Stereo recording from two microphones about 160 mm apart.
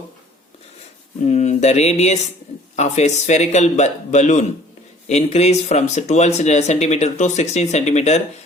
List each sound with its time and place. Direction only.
1.2 s speech: 45° left (ahead or behind)